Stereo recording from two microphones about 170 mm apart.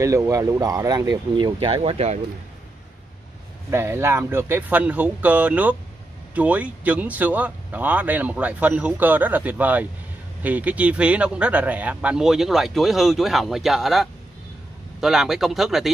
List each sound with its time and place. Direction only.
0.0 s speech: 20° right (ahead or behind); by 2.1 s 40° right (ahead or behind)
3.7 s speech: 15° right (ahead or behind)